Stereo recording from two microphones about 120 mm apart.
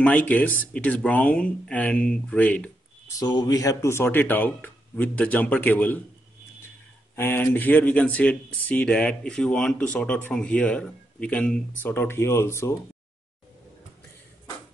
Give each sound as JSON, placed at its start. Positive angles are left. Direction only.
{"t": 0.0, "sound": "speech", "side_deg": 15}
{"t": 3.2, "sound": "speech", "side_deg": 35}
{"t": 7.2, "sound": "speech", "side_deg": 20}